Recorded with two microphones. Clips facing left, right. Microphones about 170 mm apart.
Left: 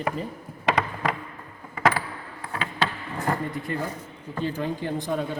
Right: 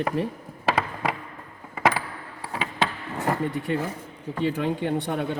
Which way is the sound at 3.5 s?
75° right (ahead or behind).